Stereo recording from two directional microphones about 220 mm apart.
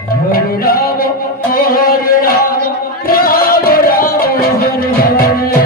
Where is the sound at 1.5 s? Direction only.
40° left (ahead or behind).